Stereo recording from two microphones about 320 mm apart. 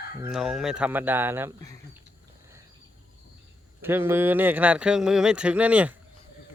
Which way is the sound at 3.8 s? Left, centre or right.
Centre.